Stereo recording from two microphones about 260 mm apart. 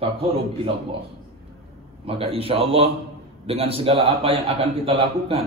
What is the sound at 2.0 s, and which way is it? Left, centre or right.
A man's voice, right.